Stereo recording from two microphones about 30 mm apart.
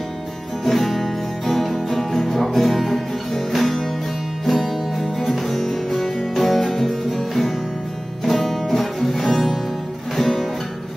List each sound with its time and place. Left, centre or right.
0.7 s music: centre
5.7 s music: centre